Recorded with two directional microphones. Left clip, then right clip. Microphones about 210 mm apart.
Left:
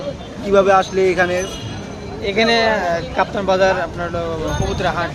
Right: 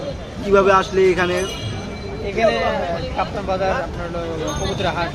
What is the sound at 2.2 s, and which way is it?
Speech, 40° left (ahead or behind).